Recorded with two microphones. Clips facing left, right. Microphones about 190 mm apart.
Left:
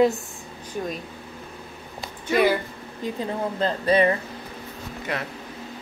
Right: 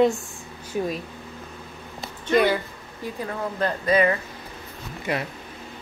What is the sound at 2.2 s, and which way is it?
Speech, 5° left (ahead or behind).